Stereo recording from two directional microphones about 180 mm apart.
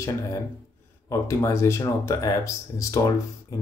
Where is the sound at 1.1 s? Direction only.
15° left (ahead or behind).